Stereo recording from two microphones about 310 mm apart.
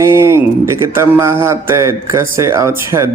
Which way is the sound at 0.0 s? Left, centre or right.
Centre.